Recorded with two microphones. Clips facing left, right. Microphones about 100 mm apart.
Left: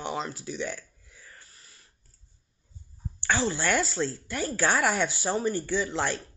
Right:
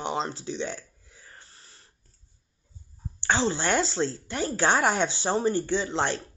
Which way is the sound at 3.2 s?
25° right (ahead or behind).